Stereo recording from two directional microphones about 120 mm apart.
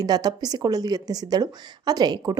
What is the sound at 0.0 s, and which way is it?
Speech, 35° right (ahead or behind).